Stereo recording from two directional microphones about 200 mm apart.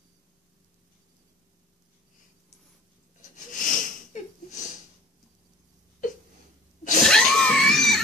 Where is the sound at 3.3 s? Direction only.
40° left (ahead or behind).